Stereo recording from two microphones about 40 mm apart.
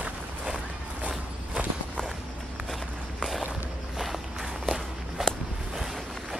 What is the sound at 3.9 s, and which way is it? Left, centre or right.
Walk, centre.